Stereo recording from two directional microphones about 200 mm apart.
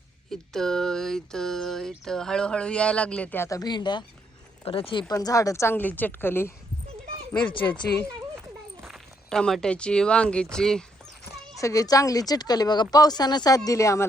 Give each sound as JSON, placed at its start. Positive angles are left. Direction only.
{"t": 0.3, "sound": "a sound", "side_deg": 0}
{"t": 4.6, "sound": "a woman's voice", "side_deg": 25}
{"t": 7.6, "sound": "a woman's voice", "side_deg": 15}
{"t": 8.8, "sound": "speech", "side_deg": 0}
{"t": 11.5, "sound": "a woman's voice", "side_deg": 15}